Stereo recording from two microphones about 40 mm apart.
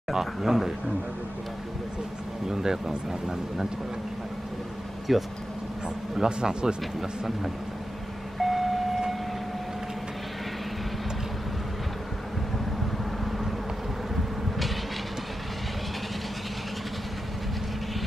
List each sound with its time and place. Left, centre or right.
0.1 s speech: centre
2.5 s speech: centre
5.1 s speech: centre
6.1 s speech: centre
8.4 s vehicle: centre